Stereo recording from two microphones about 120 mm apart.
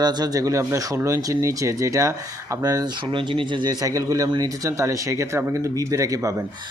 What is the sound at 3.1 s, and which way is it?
Speech, 45° right (ahead or behind).